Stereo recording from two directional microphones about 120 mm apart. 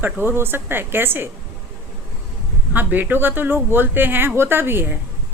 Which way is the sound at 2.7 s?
15° right (ahead or behind).